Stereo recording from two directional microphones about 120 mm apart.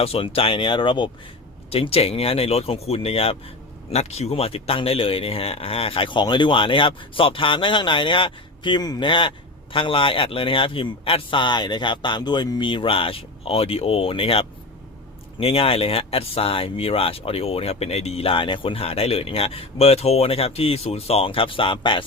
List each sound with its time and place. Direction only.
0.0 s speech: 55° left (ahead or behind)